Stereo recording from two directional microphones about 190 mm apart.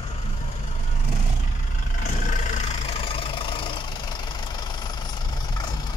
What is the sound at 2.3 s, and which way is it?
Vehicle, 40° left (ahead or behind).